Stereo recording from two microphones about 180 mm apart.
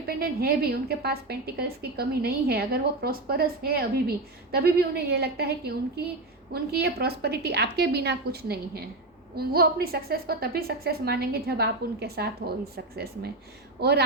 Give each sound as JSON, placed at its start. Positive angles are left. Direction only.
{"t": 0.1, "sound": "a woman's voice", "side_deg": -60}